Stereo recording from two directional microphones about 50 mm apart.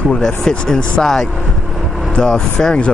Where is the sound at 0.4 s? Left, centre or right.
Centre.